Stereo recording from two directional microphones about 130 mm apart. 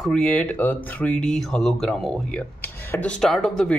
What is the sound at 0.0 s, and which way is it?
Speech, 5° left (ahead or behind).